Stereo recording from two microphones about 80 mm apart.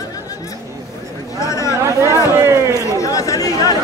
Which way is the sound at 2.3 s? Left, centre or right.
Right.